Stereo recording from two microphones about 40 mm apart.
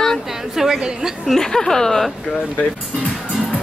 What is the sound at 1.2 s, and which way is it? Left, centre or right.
Speech, centre.